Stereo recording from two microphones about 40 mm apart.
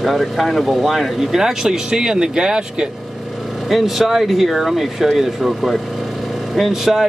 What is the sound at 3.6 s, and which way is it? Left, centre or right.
Speech, centre.